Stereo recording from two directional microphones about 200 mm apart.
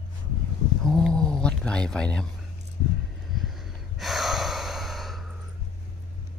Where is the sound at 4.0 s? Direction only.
Centre (ahead or behind).